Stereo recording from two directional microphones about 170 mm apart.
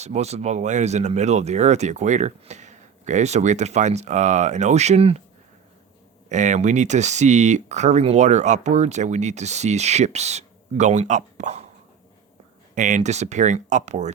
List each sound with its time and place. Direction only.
0.0 s speech: 40° right (ahead or behind)
6.2 s speech: 45° right (ahead or behind)
12.7 s speech: 45° right (ahead or behind)